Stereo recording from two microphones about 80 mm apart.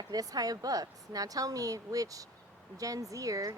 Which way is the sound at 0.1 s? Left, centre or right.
Right.